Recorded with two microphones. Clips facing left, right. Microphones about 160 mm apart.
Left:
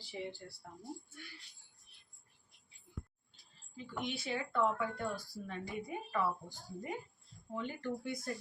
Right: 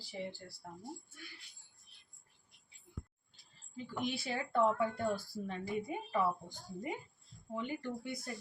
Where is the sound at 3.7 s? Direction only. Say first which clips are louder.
Right 2 dB; 35° right (ahead or behind).